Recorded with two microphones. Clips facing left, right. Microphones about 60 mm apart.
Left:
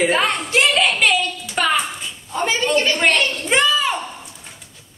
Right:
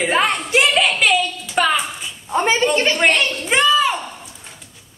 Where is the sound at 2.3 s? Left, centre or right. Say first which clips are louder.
Right 4 dB; right.